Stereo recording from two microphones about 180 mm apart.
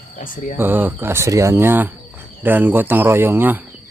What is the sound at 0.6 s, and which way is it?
Speech, 10° right (ahead or behind).